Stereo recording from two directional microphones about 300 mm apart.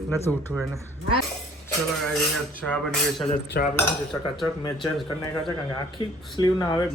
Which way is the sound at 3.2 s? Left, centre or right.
Left.